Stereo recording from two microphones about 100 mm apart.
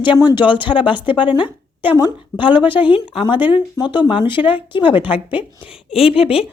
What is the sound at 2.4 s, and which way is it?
Speech, 50° left (ahead or behind).